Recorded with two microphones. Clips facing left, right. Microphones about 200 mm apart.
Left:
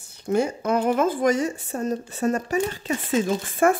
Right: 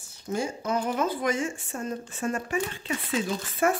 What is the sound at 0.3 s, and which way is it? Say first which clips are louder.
Speech: left 6 dB; 60° left (ahead or behind).